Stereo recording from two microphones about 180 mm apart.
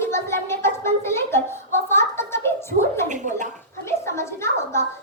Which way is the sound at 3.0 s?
45° right (ahead or behind).